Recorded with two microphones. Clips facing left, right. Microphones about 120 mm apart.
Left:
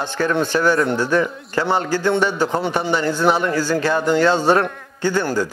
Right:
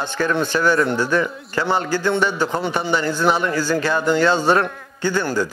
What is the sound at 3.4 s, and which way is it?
A man's voice, 35° left (ahead or behind).